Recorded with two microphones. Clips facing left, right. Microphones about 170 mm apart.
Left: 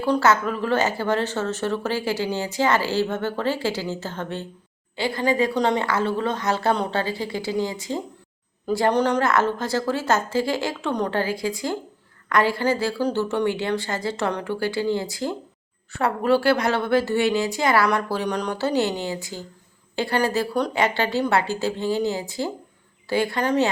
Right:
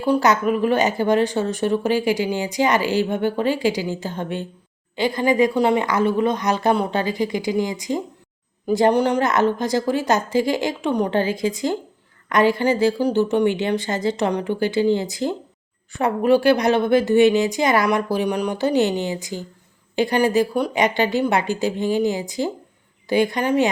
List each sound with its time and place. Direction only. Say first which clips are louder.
0.0 s speech: right 2 dB; 15° right (ahead or behind)